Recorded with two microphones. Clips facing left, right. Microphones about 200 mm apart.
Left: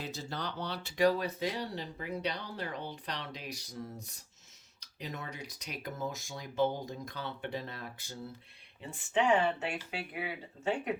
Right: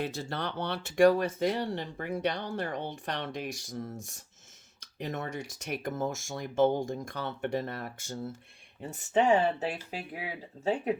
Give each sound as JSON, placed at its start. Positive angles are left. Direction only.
{"t": 0.0, "sound": "speech", "side_deg": -55}